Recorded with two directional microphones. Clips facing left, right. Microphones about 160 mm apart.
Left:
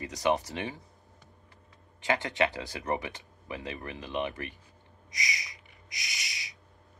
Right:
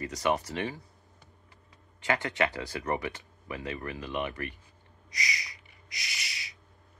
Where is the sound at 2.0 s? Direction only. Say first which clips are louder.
Left 1 dB; 20° left (ahead or behind).